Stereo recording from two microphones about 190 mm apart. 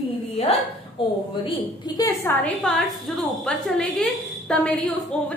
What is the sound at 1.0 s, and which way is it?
A woman's voice, 25° left (ahead or behind).